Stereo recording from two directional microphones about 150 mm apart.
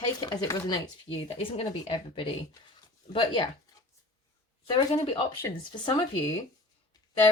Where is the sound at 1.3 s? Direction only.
40° left (ahead or behind).